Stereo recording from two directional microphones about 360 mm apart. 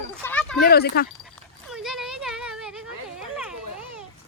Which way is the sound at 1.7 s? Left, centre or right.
Centre.